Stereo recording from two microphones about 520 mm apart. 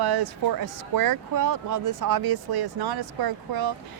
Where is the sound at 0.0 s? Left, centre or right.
Right.